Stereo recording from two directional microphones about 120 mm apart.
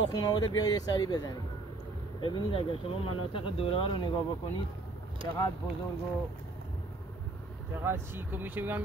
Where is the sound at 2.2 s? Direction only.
45° left (ahead or behind).